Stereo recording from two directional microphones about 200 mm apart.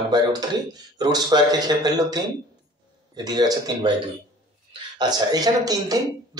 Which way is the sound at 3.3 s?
20° right (ahead or behind).